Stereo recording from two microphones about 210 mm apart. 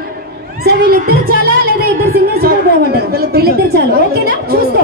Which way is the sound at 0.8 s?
45° right (ahead or behind).